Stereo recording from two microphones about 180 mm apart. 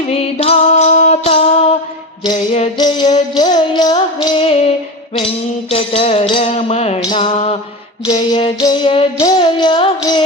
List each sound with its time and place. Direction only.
0.0 s music: 35° left (ahead or behind)
2.7 s music: 25° left (ahead or behind)
5.7 s music: 30° left (ahead or behind)
8.0 s music: 20° left (ahead or behind)